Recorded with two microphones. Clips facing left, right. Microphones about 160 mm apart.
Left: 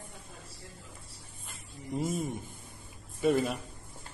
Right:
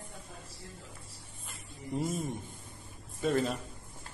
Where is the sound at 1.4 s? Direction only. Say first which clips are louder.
Even; 5° left (ahead or behind).